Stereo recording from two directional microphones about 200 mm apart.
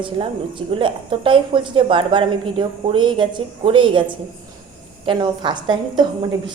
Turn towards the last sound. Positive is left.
turn(degrees=-20)  # may be behind; listen again after turning